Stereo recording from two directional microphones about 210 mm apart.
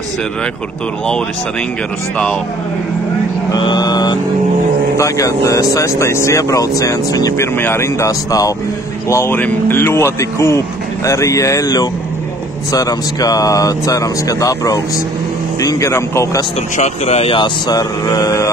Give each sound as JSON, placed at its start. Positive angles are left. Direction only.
{"t": 3.4, "sound": "speech", "side_deg": 20}
{"t": 16.7, "sound": "speech", "side_deg": 35}